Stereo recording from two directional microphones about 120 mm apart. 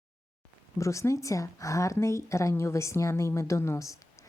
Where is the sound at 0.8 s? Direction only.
25° left (ahead or behind).